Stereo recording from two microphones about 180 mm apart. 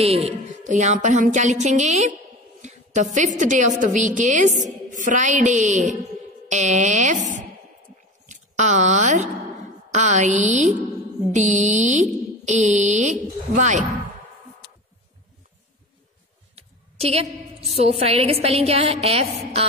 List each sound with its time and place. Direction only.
0.0 s music: 35° right (ahead or behind)
2.6 s a woman's voice: 40° right (ahead or behind)
6.5 s music: 40° right (ahead or behind)
8.3 s a woman's voice: 40° right (ahead or behind)
11.3 s music: 40° right (ahead or behind)
16.5 s a woman's voice: 35° right (ahead or behind)